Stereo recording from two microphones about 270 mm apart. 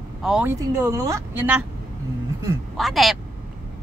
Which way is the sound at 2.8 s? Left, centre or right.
Centre.